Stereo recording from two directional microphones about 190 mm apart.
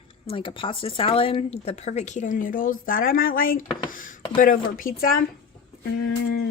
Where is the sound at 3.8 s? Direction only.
45° left (ahead or behind).